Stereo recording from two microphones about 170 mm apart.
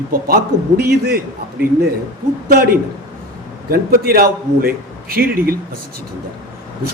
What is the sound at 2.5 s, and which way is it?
A man's voice, 60° right (ahead or behind).